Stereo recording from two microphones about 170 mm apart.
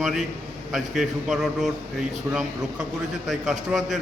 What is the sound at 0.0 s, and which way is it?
A man's voice, 5° right (ahead or behind).